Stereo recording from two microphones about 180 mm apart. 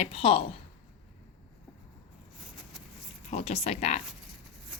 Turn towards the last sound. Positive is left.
turn(degrees=35)  # may be behind; listen again after turning